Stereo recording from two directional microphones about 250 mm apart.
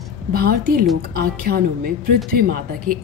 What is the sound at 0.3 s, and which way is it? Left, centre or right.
Speech, right.